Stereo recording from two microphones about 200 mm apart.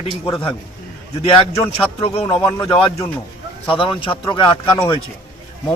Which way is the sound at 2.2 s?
15° left (ahead or behind).